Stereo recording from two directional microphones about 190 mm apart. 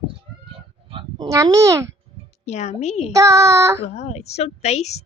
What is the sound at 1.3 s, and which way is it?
Speech, 15° right (ahead or behind).